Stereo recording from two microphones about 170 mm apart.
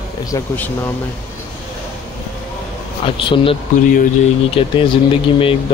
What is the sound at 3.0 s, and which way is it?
Speech, 30° left (ahead or behind).